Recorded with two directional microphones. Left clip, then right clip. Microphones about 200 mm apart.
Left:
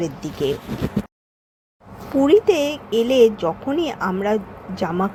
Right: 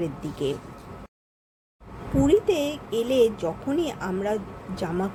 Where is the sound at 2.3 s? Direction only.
15° left (ahead or behind).